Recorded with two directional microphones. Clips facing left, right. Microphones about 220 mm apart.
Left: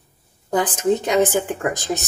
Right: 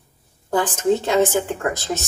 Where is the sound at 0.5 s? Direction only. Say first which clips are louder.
Even; 15° left (ahead or behind).